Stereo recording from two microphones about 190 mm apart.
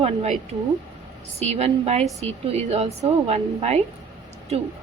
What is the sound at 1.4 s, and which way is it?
A woman's voice, 35° right (ahead or behind).